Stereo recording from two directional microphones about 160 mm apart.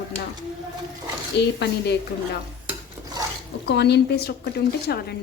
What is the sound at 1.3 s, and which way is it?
Speech, 90° left.